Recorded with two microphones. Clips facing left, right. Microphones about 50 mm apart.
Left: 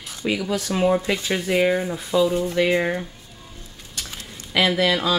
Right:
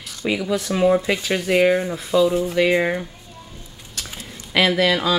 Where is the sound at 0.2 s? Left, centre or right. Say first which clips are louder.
Right 2 dB; centre.